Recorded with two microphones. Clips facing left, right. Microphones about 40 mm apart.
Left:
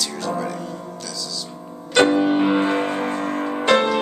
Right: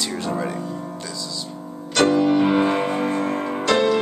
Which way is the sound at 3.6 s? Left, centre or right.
Left.